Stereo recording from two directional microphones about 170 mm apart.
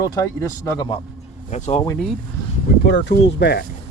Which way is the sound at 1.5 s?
45° left (ahead or behind).